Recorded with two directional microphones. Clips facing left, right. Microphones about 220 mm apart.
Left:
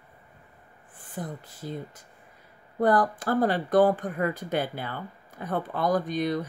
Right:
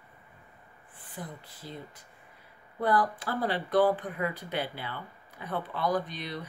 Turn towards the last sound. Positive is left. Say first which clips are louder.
# left 10 dB
turn(degrees=45)  # may be behind; listen again after turning